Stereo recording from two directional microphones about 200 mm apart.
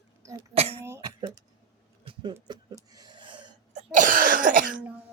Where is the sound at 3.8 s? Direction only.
40° right (ahead or behind).